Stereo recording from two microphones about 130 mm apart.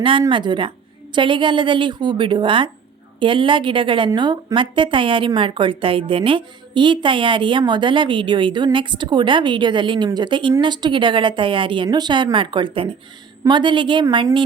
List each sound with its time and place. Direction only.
0.0 s a woman's voice: 40° right (ahead or behind)